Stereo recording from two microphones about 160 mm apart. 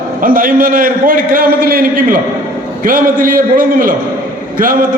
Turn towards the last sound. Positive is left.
turn(degrees=-60)  # may be behind; listen again after turning